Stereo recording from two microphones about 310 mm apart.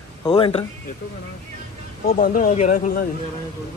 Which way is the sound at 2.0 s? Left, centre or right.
Left.